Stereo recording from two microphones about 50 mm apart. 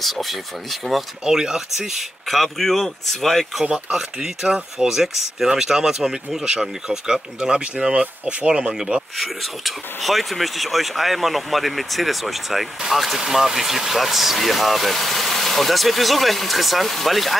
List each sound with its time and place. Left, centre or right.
0.0 s speech: centre
1.2 s speech: centre
3.7 s speech: centre
9.1 s speech: centre